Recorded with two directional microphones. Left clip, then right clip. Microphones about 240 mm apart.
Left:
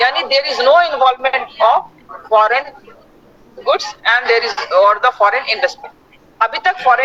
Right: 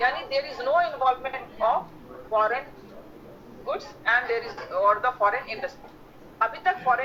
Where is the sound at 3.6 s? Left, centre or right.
Left.